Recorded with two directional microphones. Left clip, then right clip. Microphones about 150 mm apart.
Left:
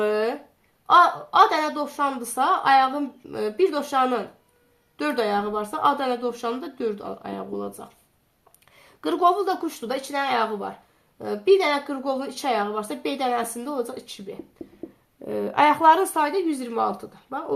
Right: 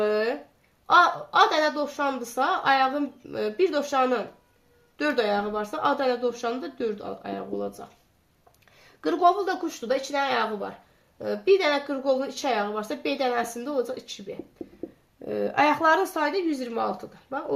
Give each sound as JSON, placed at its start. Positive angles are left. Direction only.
{"t": 0.0, "sound": "a sound", "side_deg": 40}
{"t": 0.9, "sound": "a woman's voice", "side_deg": 40}
{"t": 9.0, "sound": "a woman's voice", "side_deg": 35}
{"t": 10.2, "sound": "speech", "side_deg": 10}
{"t": 11.2, "sound": "a woman's voice", "side_deg": 35}